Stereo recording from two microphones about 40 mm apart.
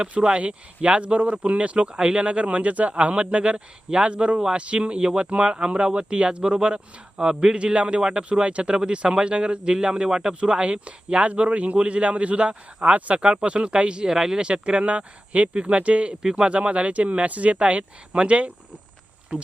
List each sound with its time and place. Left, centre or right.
0.3 s a man's voice: right
14.1 s speech: centre
14.3 s a man's voice: right